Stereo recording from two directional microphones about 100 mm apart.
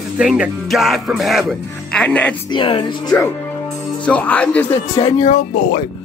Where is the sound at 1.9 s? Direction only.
10° left (ahead or behind).